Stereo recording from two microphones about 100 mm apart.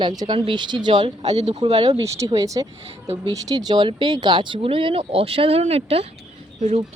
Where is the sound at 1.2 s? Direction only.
90° right.